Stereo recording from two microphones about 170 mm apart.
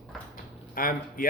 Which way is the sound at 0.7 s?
55° left (ahead or behind).